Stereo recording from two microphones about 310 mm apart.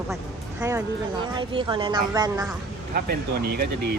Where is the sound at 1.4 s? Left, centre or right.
Centre.